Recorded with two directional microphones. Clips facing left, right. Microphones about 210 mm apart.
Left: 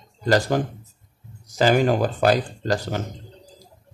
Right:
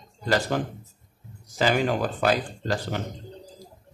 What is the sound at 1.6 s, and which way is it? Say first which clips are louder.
Speech: left 5 dB; 45° left (ahead or behind).